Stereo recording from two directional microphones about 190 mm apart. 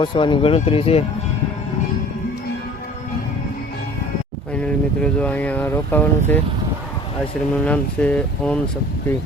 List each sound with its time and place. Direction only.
0.0 s speech: 25° left (ahead or behind)
4.5 s speech: 5° left (ahead or behind)
7.6 s speech: 5° left (ahead or behind)